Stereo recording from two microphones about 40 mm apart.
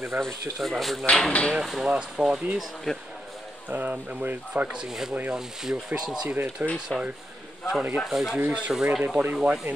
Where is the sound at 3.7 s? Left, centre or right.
Right.